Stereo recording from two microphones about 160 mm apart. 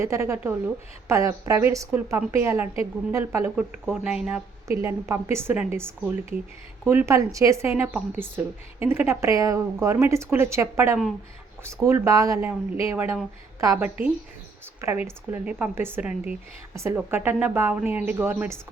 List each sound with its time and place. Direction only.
0.0 s a woman's voice: 15° right (ahead or behind)
3.5 s speech: 5° right (ahead or behind)